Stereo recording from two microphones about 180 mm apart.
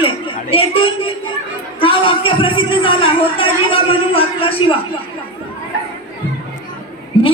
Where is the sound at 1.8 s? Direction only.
30° left (ahead or behind).